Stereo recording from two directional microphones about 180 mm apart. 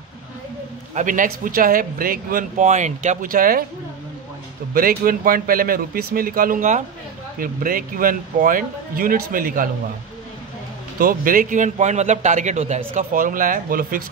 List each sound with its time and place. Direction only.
0.9 s a man's voice: 45° right (ahead or behind)
4.7 s a man's voice: 55° right (ahead or behind)
11.0 s a man's voice: 50° right (ahead or behind)